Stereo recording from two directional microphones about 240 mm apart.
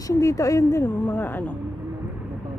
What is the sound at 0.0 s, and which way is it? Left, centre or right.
A woman's voice, centre.